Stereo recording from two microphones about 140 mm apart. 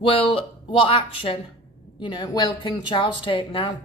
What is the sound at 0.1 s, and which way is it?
Speech, 40° left (ahead or behind).